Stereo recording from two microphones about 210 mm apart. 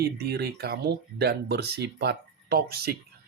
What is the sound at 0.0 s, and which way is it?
Speech, 50° right (ahead or behind).